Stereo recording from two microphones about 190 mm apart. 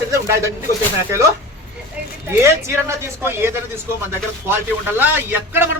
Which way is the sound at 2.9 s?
15° right (ahead or behind).